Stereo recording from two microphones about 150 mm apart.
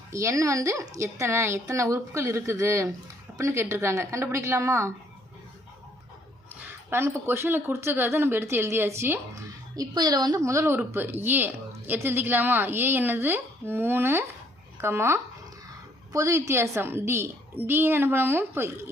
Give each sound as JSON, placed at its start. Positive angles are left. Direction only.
{"t": 0.1, "sound": "a woman's voice", "side_deg": -20}
{"t": 6.5, "sound": "a woman's voice", "side_deg": -10}